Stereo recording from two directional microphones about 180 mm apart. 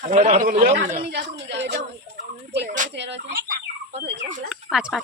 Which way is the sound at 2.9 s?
75° right (ahead or behind).